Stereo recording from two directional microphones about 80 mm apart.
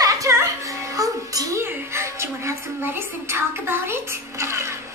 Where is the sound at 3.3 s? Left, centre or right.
Right.